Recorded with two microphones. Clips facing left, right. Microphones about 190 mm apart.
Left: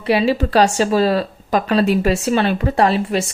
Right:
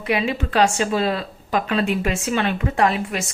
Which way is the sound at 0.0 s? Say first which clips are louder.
Left 6 dB; 30° left (ahead or behind).